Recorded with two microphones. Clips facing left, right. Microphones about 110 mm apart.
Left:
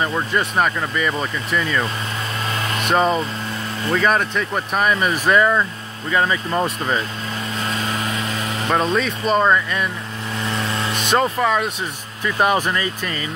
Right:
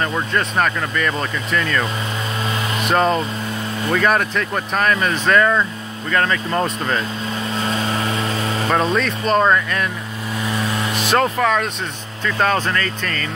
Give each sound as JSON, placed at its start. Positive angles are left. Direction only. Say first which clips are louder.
{"t": 0.0, "sound": "speech", "louder": "even", "side_deg": 5}
{"t": 7.6, "sound": "vehicle", "louder": "right 2 dB", "side_deg": -30}
{"t": 8.6, "sound": "speech", "louder": "even", "side_deg": 0}
{"t": 10.4, "sound": "vehicle", "louder": "right 1 dB", "side_deg": -10}
{"t": 12.3, "sound": "speech", "louder": "even", "side_deg": 15}